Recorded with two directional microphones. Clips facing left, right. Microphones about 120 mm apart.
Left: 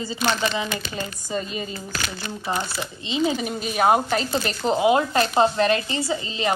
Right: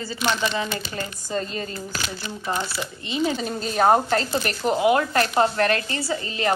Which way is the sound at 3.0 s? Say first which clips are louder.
Left 1 dB; 20° left (ahead or behind).